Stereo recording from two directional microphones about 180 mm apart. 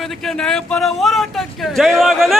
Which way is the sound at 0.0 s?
Centre (ahead or behind).